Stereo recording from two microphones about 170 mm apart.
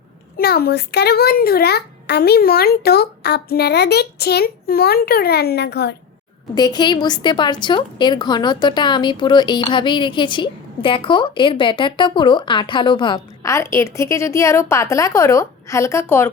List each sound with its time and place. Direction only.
0.3 s a child's voice: 65° left (ahead or behind)
6.5 s a woman's voice: 25° left (ahead or behind)